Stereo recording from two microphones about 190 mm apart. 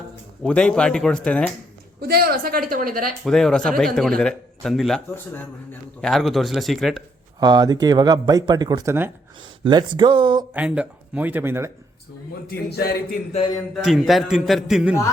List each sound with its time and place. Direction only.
0.4 s a man's voice: 5° left (ahead or behind)
2.0 s speech: 50° right (ahead or behind)
3.2 s a man's voice: centre (ahead or behind)
7.3 s speech: 20° right (ahead or behind)
9.6 s speech: 25° right (ahead or behind)
10.5 s speech: 10° right (ahead or behind)
12.5 s speech: 55° left (ahead or behind)
13.7 s a man's voice: centre (ahead or behind)